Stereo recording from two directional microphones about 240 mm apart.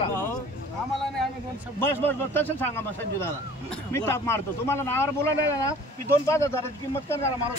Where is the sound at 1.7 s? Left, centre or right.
Centre.